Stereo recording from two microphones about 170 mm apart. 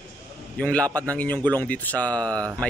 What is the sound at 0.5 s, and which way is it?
Speech, 5° left (ahead or behind).